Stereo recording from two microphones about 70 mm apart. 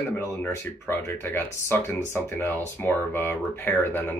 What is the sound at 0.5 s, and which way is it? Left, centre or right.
Speech, left.